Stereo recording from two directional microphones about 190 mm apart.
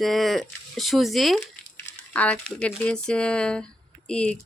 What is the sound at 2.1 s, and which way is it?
Speech, 5° left (ahead or behind).